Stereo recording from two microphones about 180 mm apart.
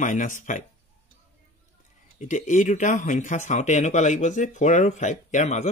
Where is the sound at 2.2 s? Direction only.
45° left (ahead or behind).